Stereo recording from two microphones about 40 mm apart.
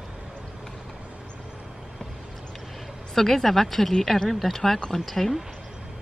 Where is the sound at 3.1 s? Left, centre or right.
Centre.